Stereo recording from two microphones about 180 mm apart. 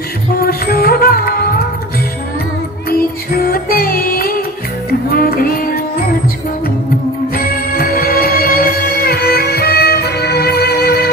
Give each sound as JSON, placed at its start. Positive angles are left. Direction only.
{"t": 0.4, "sound": "music", "side_deg": 60}
{"t": 2.9, "sound": "music", "side_deg": 55}
{"t": 7.3, "sound": "music", "side_deg": 55}